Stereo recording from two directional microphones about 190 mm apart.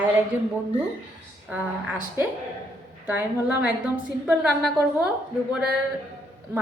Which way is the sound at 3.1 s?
10° right (ahead or behind).